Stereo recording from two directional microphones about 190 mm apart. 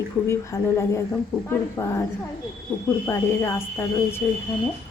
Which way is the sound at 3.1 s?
15° left (ahead or behind).